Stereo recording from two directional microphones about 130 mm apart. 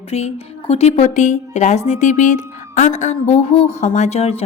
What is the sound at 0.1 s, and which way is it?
A woman's voice, 55° left (ahead or behind).